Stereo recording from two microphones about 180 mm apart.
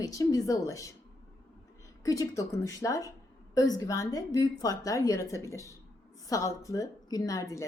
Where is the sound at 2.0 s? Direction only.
20° left (ahead or behind).